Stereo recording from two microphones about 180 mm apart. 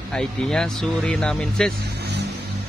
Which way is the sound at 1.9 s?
65° right (ahead or behind).